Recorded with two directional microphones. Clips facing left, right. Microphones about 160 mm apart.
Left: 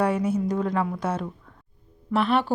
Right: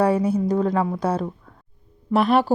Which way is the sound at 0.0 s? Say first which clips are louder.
Right 4 dB; 35° right (ahead or behind).